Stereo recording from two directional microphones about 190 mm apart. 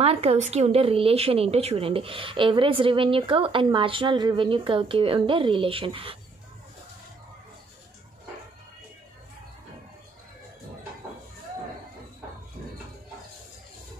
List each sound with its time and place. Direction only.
0.0 s speech: 30° right (ahead or behind)